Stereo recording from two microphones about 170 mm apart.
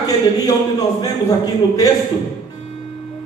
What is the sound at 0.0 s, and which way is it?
A man's voice, 20° left (ahead or behind).